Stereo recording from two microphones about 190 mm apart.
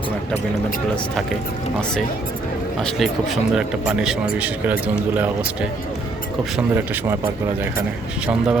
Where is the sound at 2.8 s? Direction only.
5° left (ahead or behind).